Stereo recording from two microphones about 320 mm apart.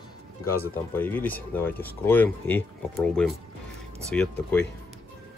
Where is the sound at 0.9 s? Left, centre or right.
Centre.